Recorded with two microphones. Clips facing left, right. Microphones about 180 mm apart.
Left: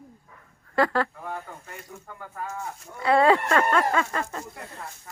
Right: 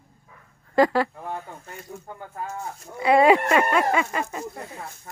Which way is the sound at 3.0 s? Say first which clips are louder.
Right 3 dB; 15° right (ahead or behind).